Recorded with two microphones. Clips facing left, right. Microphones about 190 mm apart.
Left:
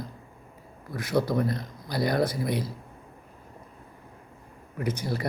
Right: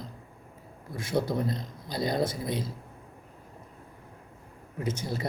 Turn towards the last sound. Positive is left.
turn(degrees=-25)  # may be behind; listen again after turning